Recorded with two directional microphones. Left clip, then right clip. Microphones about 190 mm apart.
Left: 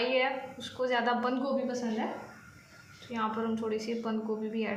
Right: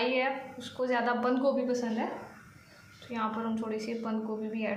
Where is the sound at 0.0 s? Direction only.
15° right (ahead or behind).